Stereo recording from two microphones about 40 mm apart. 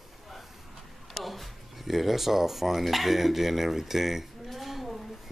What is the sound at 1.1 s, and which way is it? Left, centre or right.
Speech, centre.